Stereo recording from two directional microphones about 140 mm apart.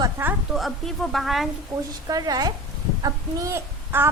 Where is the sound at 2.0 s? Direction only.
25° right (ahead or behind).